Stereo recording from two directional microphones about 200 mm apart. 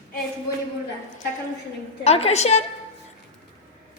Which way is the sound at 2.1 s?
30° left (ahead or behind).